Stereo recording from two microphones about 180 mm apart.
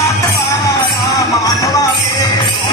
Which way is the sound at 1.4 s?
20° left (ahead or behind).